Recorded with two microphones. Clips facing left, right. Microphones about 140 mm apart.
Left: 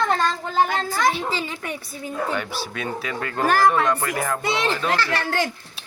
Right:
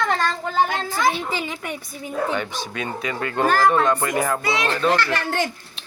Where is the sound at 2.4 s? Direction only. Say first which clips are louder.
Right 1 dB; 5° left (ahead or behind).